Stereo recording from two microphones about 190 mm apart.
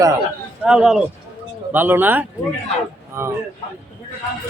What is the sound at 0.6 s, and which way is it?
Speech, 5° right (ahead or behind).